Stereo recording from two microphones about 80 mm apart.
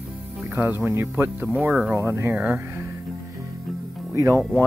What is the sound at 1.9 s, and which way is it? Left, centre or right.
Speech, right.